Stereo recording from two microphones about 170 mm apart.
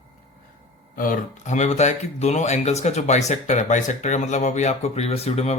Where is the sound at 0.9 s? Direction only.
55° left (ahead or behind).